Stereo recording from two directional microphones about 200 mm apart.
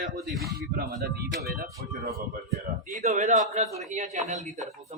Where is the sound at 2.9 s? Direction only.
35° right (ahead or behind).